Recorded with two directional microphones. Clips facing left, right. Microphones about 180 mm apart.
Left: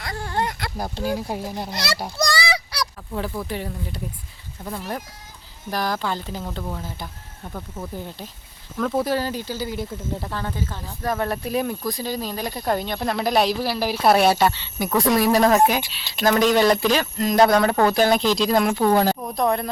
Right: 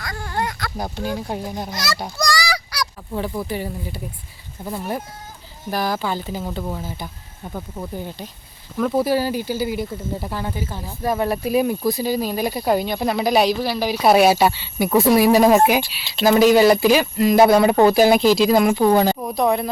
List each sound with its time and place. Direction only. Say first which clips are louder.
0.0 s a sound: even; 30° left (ahead or behind)
1.0 s speech: left 1 dB; 5° left (ahead or behind)
2.3 s honk: right 1 dB; 25° left (ahead or behind)
3.1 s speech: right 4 dB; 5° right (ahead or behind)